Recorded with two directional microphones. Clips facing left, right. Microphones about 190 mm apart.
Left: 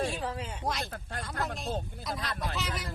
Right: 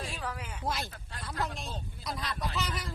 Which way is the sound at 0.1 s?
25° left (ahead or behind).